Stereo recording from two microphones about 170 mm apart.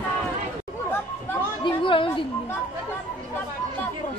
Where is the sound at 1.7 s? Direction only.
30° left (ahead or behind).